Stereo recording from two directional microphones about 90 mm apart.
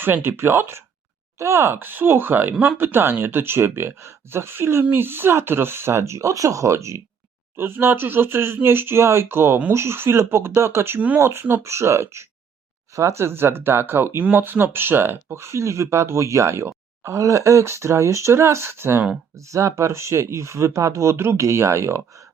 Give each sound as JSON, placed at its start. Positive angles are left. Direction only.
{"t": 0.0, "sound": "speech", "side_deg": -25}